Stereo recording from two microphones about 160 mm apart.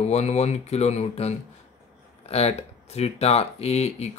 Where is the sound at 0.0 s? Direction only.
45° left (ahead or behind).